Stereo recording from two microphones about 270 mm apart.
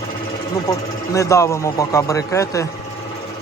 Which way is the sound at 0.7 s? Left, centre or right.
Centre.